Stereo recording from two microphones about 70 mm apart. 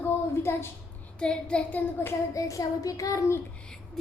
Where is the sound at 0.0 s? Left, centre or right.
Left.